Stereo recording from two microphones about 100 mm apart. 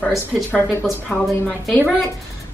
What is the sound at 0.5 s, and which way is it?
Speech, 20° left (ahead or behind).